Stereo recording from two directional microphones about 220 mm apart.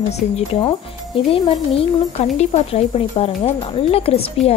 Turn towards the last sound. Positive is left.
turn(degrees=25)  # may be behind; listen again after turning